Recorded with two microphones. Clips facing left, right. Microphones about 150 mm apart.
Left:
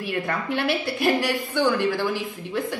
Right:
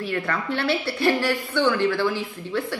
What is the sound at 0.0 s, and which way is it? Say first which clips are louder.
A woman's voice: even; 20° left (ahead or behind).